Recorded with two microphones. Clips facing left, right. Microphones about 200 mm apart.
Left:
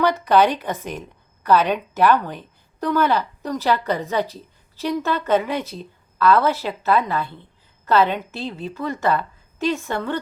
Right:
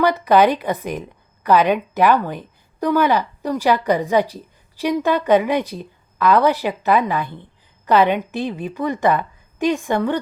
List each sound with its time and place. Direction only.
0.0 s a woman's voice: 10° right (ahead or behind)